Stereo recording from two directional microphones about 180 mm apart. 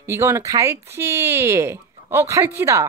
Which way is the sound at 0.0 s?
15° right (ahead or behind).